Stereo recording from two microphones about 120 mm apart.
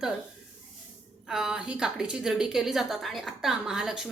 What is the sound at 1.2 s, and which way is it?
A woman's voice, 5° right (ahead or behind).